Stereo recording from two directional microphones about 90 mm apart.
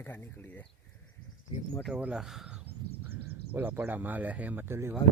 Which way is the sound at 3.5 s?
20° right (ahead or behind).